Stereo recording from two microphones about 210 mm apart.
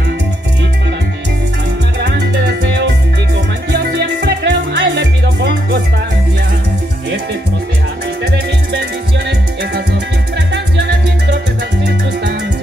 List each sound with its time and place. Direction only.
2.0 s music: 55° right (ahead or behind)
8.2 s music: 55° right (ahead or behind)
10.5 s music: 55° right (ahead or behind)